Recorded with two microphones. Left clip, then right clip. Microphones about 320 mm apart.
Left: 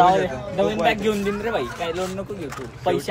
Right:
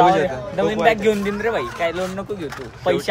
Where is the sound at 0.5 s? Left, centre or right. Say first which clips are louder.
Right 3 dB; centre.